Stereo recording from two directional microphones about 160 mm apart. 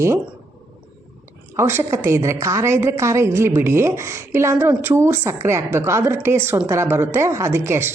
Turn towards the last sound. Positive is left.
turn(degrees=-15)  # may be behind; listen again after turning